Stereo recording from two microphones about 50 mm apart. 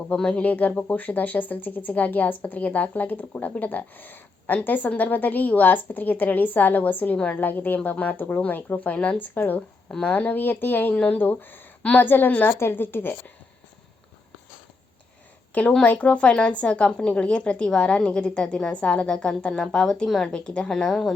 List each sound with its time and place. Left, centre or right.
0.2 s a woman's voice: centre
0.4 s speech: left
7.2 s speech: left
7.4 s speech: left
12.5 s a woman's voice: left
15.8 s a woman's voice: left; by 21.0 s centre